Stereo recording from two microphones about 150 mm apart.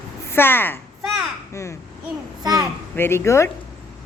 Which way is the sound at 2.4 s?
25° right (ahead or behind).